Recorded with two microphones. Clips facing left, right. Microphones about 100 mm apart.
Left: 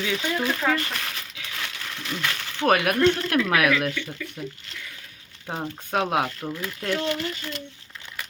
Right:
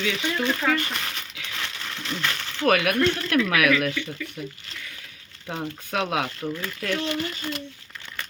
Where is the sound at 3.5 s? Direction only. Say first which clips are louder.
Left 1 dB; 35° left (ahead or behind).